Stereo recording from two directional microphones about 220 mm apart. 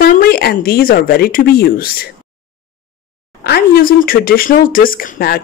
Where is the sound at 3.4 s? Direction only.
45° left (ahead or behind).